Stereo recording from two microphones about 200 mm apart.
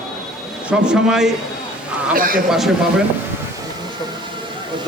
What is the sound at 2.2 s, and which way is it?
Speech, 45° right (ahead or behind).